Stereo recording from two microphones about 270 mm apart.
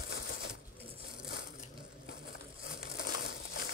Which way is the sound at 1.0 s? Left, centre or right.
Left.